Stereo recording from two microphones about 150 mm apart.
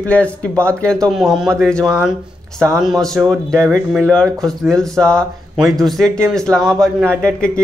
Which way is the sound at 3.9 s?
5° left (ahead or behind).